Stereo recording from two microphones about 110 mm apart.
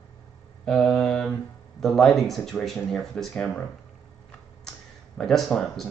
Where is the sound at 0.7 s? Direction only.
5° left (ahead or behind).